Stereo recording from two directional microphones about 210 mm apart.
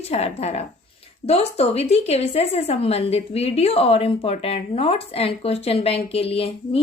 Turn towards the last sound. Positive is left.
turn(degrees=25)  # may be behind; listen again after turning